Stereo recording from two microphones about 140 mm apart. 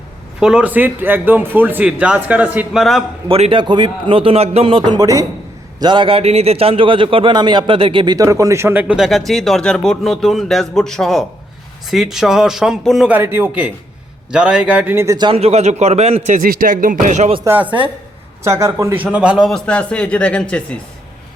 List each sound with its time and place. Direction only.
0.3 s speech: 5° right (ahead or behind)
3.2 s a man's voice: 45° right (ahead or behind)
4.9 s a man's voice: 25° right (ahead or behind)
5.8 s a man's voice: 35° right (ahead or behind); by 9.0 s 10° right (ahead or behind)
9.0 s speech: centre (ahead or behind)
13.1 s speech: 15° right (ahead or behind)
15.3 s speech: 45° right (ahead or behind)
17.4 s speech: 15° right (ahead or behind)
17.7 s a man's voice: 35° right (ahead or behind)
18.4 s a man's voice: 20° right (ahead or behind)
19.0 s speech: 10° right (ahead or behind); by 20.7 s 10° left (ahead or behind)